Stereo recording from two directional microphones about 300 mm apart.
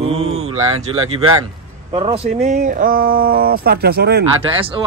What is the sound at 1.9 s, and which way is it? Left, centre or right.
Speech, centre.